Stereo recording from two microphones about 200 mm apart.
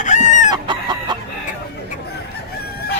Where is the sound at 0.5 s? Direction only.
20° right (ahead or behind).